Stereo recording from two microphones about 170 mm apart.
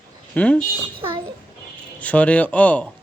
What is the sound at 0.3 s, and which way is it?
Speech, 10° left (ahead or behind).